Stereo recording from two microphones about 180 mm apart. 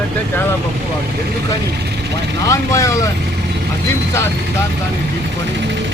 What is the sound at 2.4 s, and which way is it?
Speech, 15° left (ahead or behind).